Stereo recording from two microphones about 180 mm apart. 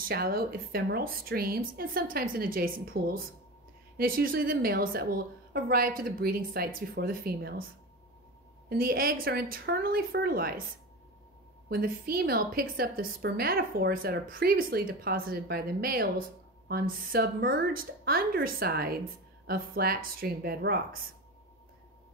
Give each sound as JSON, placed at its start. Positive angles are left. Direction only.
{"t": 0.1, "sound": "a woman's voice", "side_deg": -55}
{"t": 8.6, "sound": "a woman's voice", "side_deg": -55}
{"t": 11.7, "sound": "a woman's voice", "side_deg": -55}